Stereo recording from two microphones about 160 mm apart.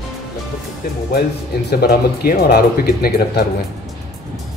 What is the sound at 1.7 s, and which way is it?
Speech, 80° left.